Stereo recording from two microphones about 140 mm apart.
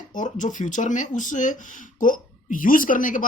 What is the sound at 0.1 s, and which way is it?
Speech, 65° left (ahead or behind).